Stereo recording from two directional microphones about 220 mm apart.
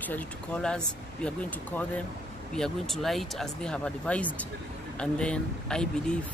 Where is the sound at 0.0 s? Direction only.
5° left (ahead or behind).